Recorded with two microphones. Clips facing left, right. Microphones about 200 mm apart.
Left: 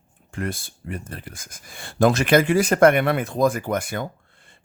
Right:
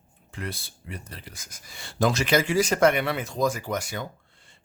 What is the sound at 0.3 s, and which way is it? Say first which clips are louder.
Speech: left 7 dB; 50° left (ahead or behind).